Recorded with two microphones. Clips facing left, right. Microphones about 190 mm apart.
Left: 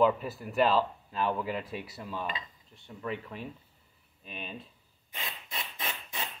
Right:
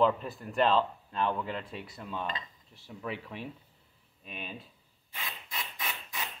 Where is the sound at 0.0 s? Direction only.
5° left (ahead or behind).